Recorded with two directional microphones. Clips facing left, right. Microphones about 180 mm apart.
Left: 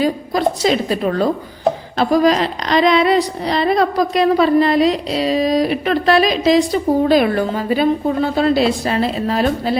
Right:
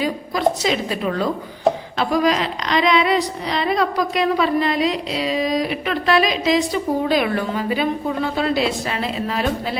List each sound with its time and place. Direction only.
0.0 s a woman's voice: 40° left (ahead or behind)